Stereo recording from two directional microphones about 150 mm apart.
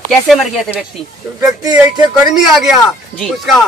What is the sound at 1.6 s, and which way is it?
Speech, 25° right (ahead or behind).